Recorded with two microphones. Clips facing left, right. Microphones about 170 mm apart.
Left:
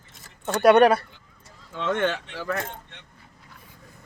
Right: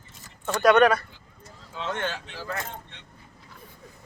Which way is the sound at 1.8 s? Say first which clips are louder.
Left 6 dB; 60° left (ahead or behind).